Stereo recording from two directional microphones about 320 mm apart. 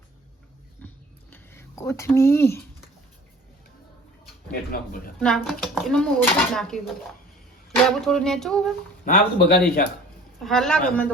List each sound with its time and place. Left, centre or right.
1.3 s a sound: centre
4.7 s speech: left
5.2 s speech: centre
9.0 s speech: left
10.4 s speech: centre